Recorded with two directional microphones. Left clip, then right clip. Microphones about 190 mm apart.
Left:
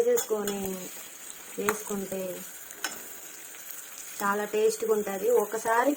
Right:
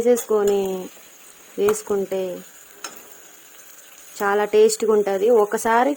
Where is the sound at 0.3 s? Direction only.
55° right (ahead or behind).